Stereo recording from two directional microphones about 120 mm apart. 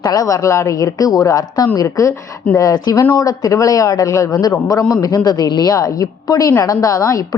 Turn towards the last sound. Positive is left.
turn(degrees=25)  # may be behind; listen again after turning